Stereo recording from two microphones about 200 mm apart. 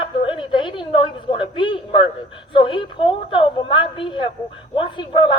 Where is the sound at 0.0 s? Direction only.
25° left (ahead or behind).